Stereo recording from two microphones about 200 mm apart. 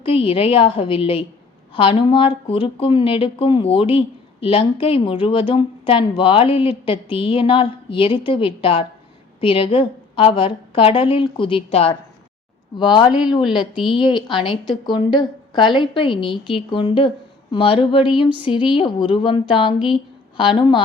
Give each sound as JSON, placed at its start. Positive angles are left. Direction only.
{"t": 0.0, "sound": "a woman's voice", "side_deg": 30}